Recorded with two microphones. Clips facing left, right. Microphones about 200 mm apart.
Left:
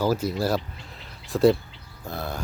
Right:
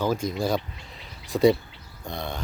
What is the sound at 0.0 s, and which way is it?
Speech, 5° left (ahead or behind).